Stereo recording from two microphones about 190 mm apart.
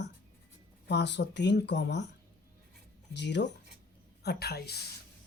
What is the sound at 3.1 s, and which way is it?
Speech, 65° left (ahead or behind).